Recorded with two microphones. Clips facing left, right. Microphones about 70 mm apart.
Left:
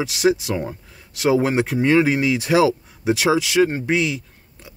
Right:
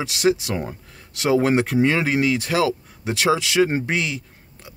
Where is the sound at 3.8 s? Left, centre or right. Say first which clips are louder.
Left 4 dB; centre.